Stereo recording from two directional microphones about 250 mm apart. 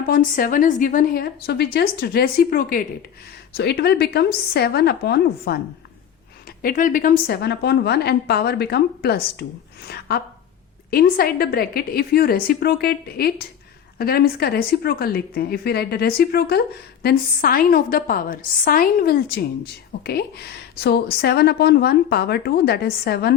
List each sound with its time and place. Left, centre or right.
0.0 s speech: left
6.6 s speech: left